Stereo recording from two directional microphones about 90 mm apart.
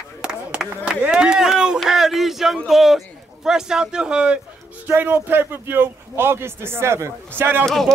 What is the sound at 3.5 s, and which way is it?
Speech, 5° right (ahead or behind).